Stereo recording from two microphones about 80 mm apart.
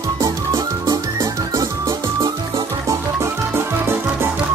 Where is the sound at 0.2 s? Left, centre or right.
Right.